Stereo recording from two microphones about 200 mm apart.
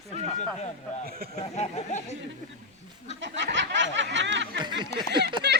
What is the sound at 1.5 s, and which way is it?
Speech, 35° left (ahead or behind).